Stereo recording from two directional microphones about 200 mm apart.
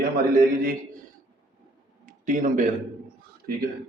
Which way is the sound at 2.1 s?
40° right (ahead or behind).